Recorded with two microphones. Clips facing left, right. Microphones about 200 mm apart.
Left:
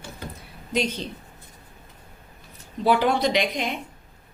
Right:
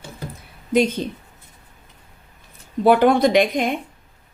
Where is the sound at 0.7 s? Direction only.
50° right (ahead or behind).